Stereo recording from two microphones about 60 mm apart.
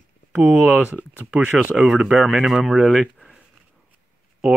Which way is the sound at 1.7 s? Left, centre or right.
Centre.